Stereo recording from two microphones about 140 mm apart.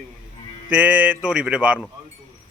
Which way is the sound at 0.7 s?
10° right (ahead or behind).